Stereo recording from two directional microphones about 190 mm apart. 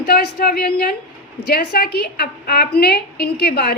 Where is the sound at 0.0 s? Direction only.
55° left (ahead or behind).